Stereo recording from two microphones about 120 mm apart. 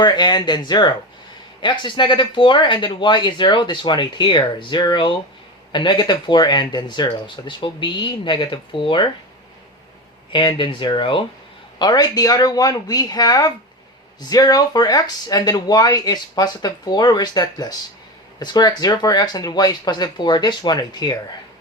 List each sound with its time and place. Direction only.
0.0 s speech: 35° left (ahead or behind)
10.3 s speech: 40° left (ahead or behind)
11.8 s speech: 35° left (ahead or behind)